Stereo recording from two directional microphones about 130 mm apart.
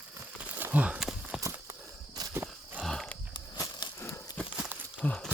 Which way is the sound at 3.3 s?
35° left (ahead or behind).